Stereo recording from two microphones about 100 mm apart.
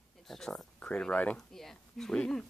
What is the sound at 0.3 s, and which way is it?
A woman's voice, 5° left (ahead or behind).